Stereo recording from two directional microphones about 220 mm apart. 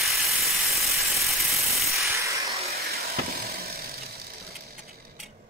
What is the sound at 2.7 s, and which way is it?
Vehicle, 45° right (ahead or behind).